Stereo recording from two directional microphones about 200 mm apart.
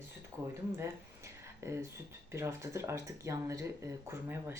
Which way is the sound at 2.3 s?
15° right (ahead or behind).